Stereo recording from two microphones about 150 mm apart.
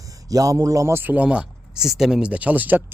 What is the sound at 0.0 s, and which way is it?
A man's voice, 25° right (ahead or behind).